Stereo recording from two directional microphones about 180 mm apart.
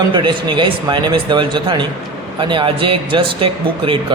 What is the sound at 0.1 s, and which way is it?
Speech, 25° right (ahead or behind).